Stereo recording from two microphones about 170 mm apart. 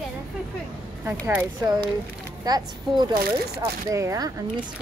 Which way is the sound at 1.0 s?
10° right (ahead or behind).